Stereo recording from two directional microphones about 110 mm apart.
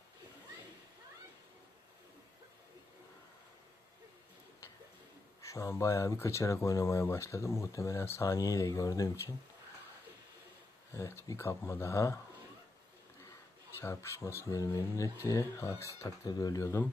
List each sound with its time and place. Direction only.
5.4 s speech: 25° left (ahead or behind)
10.9 s speech: 25° left (ahead or behind)
13.8 s speech: 25° left (ahead or behind)